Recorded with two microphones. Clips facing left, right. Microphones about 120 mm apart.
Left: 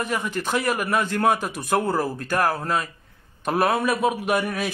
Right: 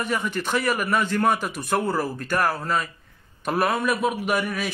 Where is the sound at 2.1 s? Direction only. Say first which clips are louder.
Even; 45° left (ahead or behind).